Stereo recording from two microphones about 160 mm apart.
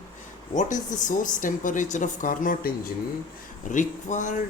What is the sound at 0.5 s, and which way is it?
Speech, 50° left (ahead or behind).